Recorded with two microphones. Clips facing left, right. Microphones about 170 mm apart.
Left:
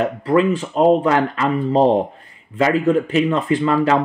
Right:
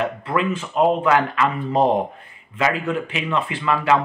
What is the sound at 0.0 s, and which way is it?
Speech, 35° left (ahead or behind).